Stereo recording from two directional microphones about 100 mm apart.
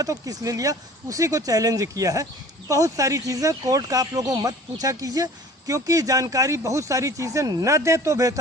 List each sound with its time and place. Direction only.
0.0 s speech: 35° right (ahead or behind)